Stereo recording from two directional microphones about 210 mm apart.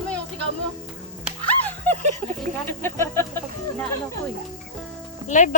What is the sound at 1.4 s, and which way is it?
Music, 10° left (ahead or behind).